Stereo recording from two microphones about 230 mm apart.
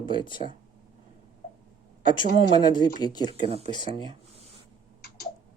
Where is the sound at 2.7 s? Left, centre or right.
Centre.